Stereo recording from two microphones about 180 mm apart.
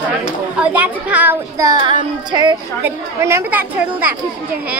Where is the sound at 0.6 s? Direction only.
10° right (ahead or behind); by 2.5 s 25° right (ahead or behind).